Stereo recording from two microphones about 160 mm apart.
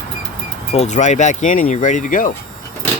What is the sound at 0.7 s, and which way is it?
Speech, 45° left (ahead or behind).